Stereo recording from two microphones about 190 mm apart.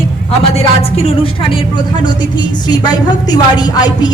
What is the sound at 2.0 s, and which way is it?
A woman's voice, 20° left (ahead or behind).